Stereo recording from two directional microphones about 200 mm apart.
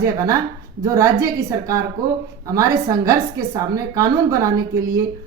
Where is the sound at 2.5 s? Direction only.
15° right (ahead or behind).